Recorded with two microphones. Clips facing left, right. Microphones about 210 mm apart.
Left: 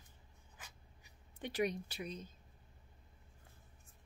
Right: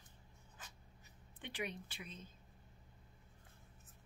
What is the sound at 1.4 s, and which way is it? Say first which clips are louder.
Speech: left 8 dB; 40° left (ahead or behind).